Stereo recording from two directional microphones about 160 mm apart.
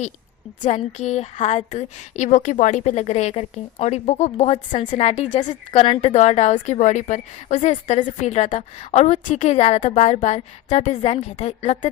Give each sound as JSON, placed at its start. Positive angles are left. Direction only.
{"t": 0.6, "sound": "a woman's voice", "side_deg": 45}